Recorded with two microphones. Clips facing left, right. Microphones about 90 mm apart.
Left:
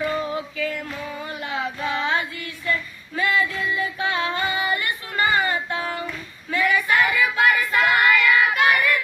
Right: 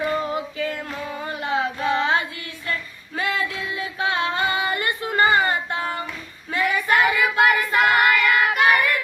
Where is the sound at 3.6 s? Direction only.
25° right (ahead or behind).